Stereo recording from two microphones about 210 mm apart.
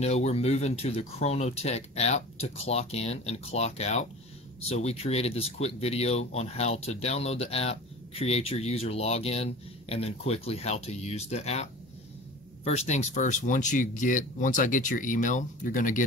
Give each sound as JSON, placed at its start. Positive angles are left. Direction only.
{"t": 0.0, "sound": "speech", "side_deg": 30}